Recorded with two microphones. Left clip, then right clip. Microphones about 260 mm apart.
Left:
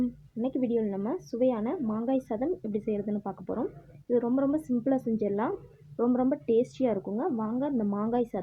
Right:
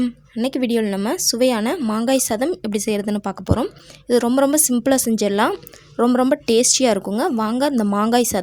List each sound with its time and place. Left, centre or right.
0.0 s speech: right